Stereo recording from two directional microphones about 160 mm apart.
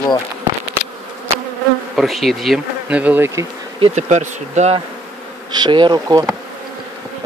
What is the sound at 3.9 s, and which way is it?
Speech, 50° right (ahead or behind).